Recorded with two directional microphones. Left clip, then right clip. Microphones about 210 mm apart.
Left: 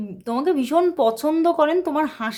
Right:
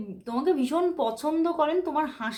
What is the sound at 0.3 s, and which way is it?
A woman's voice, 30° left (ahead or behind).